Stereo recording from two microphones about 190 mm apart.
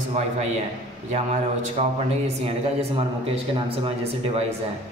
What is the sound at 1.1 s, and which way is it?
Speech, 35° right (ahead or behind).